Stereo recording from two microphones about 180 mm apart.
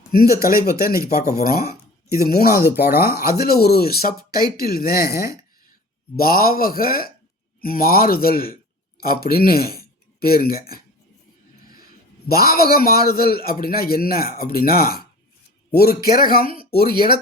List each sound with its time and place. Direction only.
1.1 s speech: 15° right (ahead or behind)
1.4 s a man's voice: 60° left (ahead or behind)
2.6 s speech: 10° right (ahead or behind)
3.0 s a man's voice: 60° left (ahead or behind)
12.3 s a man's voice: 55° left (ahead or behind)